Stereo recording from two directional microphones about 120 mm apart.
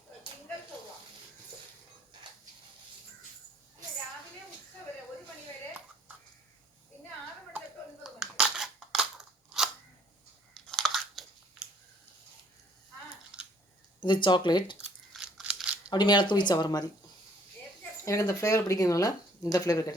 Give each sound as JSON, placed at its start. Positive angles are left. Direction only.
{"t": 8.0, "sound": "scissors", "side_deg": -5}
{"t": 10.5, "sound": "a sound", "side_deg": 5}
{"t": 13.3, "sound": "chewing", "side_deg": -5}
{"t": 14.0, "sound": "speech", "side_deg": 40}
{"t": 15.1, "sound": "a sound", "side_deg": -5}
{"t": 15.9, "sound": "speech", "side_deg": 40}
{"t": 18.0, "sound": "speech", "side_deg": 25}